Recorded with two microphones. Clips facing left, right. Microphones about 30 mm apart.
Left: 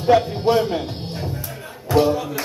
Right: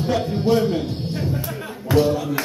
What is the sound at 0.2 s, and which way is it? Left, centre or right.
Music, centre.